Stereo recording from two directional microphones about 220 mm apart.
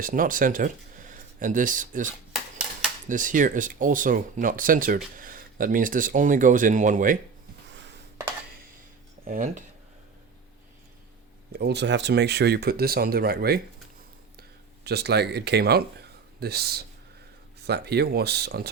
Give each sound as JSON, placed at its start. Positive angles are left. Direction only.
{"t": 0.0, "sound": "speech", "side_deg": -40}
{"t": 9.2, "sound": "speech", "side_deg": -35}
{"t": 11.5, "sound": "speech", "side_deg": -50}
{"t": 14.8, "sound": "speech", "side_deg": -45}